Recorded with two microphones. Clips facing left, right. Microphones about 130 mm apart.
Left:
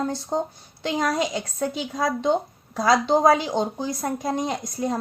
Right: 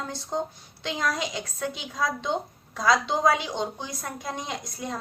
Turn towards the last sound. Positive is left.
turn(degrees=40)  # may be behind; listen again after turning